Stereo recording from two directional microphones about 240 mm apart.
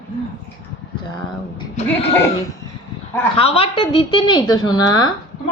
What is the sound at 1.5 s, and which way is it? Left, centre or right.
Speech, left.